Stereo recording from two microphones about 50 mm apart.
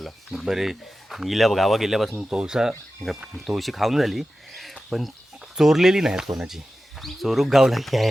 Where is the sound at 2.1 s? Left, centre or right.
Centre.